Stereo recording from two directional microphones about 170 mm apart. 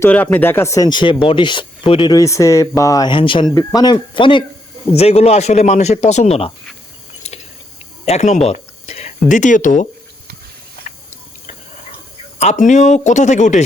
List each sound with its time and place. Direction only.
0.0 s speech: 10° left (ahead or behind); by 6.5 s 35° left (ahead or behind)
8.0 s speech: 40° left (ahead or behind)
12.4 s speech: 45° left (ahead or behind)